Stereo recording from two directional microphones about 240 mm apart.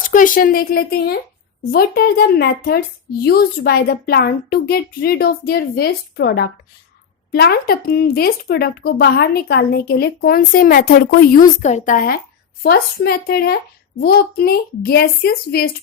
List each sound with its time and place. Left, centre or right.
0.1 s speech: left